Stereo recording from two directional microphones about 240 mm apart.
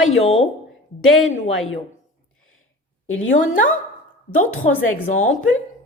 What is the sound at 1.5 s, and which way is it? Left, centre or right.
Speech, left.